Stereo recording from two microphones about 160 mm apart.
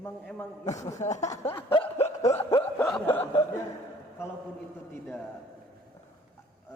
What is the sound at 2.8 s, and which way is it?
Chuckle, 10° left (ahead or behind).